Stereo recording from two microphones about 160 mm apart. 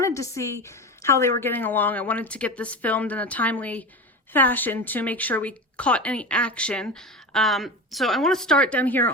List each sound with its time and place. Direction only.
0.0 s a woman's voice: 20° left (ahead or behind)